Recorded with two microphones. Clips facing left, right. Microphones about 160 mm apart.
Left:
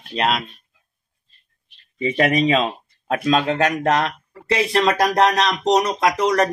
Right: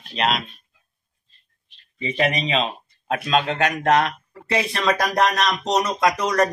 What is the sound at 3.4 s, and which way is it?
Speech, 35° left (ahead or behind).